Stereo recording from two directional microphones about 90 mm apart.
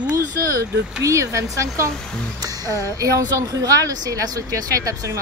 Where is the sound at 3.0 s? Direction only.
40° right (ahead or behind).